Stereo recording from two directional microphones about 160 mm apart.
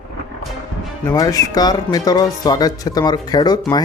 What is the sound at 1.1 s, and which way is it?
Speech, 20° left (ahead or behind).